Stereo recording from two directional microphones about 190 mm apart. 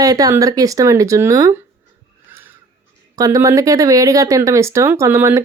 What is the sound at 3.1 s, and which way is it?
Speech, 20° right (ahead or behind).